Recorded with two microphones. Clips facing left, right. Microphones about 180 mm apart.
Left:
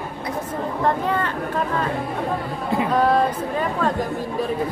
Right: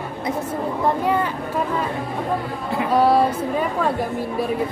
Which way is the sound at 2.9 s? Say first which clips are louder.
Right 3 dB; 10° right (ahead or behind).